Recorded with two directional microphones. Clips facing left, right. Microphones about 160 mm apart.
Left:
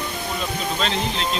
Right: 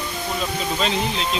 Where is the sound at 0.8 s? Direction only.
5° right (ahead or behind).